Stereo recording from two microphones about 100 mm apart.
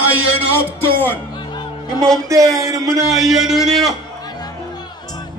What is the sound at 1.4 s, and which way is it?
Music, 50° left (ahead or behind).